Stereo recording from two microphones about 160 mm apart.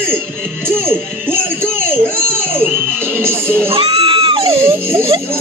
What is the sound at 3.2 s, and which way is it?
Speech, 15° right (ahead or behind).